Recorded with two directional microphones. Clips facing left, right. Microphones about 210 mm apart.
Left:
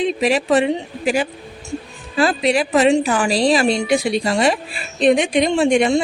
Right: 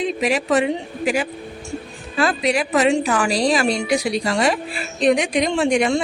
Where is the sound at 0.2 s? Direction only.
30° left (ahead or behind).